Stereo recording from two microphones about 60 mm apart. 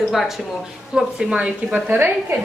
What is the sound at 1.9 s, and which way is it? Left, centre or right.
Speech, right.